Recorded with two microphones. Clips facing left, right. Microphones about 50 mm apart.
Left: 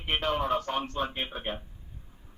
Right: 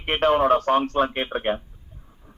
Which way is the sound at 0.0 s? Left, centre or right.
Right.